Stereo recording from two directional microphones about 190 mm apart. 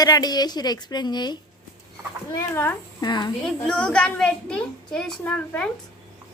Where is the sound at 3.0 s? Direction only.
25° left (ahead or behind).